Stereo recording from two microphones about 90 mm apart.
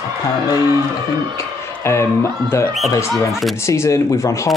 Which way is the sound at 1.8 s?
30° left (ahead or behind).